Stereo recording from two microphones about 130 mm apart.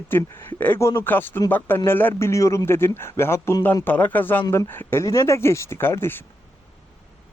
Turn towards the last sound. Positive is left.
turn(degrees=20)  # may be behind; listen again after turning